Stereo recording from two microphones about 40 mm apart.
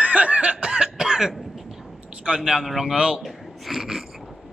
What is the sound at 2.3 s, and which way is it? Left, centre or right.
Speech, centre.